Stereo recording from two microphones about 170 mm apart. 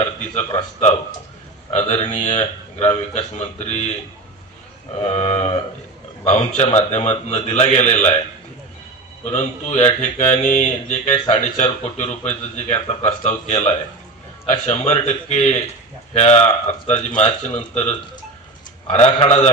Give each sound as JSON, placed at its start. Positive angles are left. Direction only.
{"t": 0.3, "sound": "speech", "side_deg": 40}
{"t": 5.0, "sound": "speech", "side_deg": 40}
{"t": 6.6, "sound": "speech", "side_deg": 40}
{"t": 9.2, "sound": "speech", "side_deg": 40}
{"t": 18.9, "sound": "speech", "side_deg": 40}